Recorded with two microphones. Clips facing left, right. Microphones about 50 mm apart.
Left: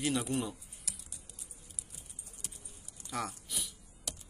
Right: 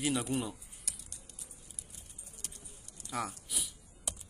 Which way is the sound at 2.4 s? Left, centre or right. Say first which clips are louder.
Even; centre.